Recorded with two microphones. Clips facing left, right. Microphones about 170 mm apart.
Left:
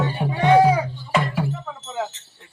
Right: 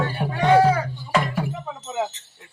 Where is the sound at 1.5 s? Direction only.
15° right (ahead or behind).